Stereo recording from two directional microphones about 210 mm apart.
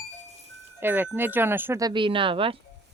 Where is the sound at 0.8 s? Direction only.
10° right (ahead or behind); by 2.6 s 25° right (ahead or behind).